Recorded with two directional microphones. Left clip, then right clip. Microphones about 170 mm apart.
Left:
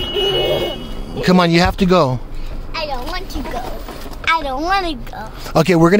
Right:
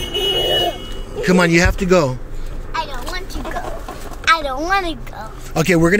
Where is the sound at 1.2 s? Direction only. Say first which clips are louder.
Even; 25° left (ahead or behind).